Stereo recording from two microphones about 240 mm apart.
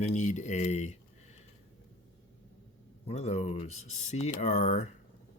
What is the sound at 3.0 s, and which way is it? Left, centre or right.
Speech, left.